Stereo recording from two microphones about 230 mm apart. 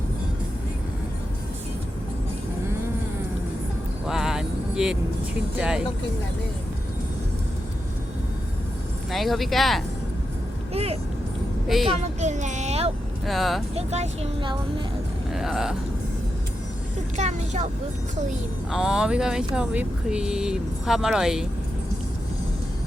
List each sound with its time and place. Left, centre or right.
4.0 s vehicle: centre
5.5 s speech: centre
9.1 s speech: centre
12.2 s speech: right
13.2 s speech: centre
13.7 s speech: right
15.3 s speech: centre
17.2 s speech: right
18.7 s speech: centre